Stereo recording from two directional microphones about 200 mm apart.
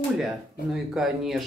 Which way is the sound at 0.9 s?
Centre (ahead or behind).